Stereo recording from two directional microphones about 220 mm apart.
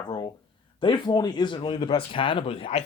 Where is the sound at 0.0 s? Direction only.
20° left (ahead or behind).